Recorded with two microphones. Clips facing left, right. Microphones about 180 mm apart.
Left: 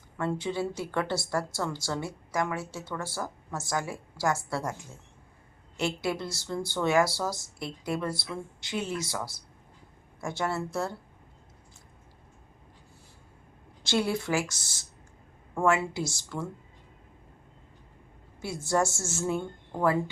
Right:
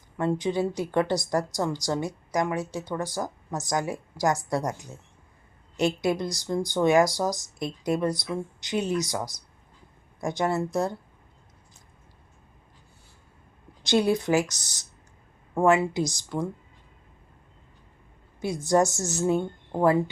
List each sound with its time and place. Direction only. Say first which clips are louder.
0.2 s speech: right 5 dB; 15° right (ahead or behind)
13.8 s speech: right 5 dB; 20° right (ahead or behind)
15.9 s speech: right 6 dB; 15° right (ahead or behind)
18.3 s speech: right 5 dB; 15° right (ahead or behind)